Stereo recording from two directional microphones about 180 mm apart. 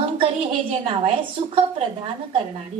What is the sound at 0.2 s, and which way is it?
A woman's voice, 35° right (ahead or behind).